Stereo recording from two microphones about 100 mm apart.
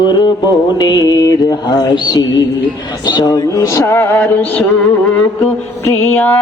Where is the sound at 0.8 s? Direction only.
40° left (ahead or behind); by 4.4 s 20° left (ahead or behind).